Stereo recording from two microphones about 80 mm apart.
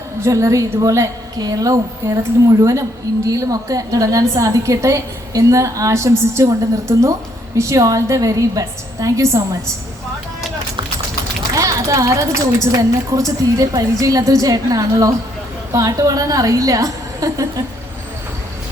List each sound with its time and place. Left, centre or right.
0.2 s a woman's voice: right
11.5 s a woman's voice: right